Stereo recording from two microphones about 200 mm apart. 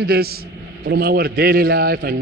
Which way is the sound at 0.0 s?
50° right (ahead or behind).